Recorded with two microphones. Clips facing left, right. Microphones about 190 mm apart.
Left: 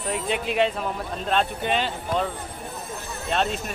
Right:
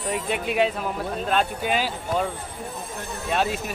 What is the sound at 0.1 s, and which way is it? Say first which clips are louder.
A man's voice: even; 5° right (ahead or behind).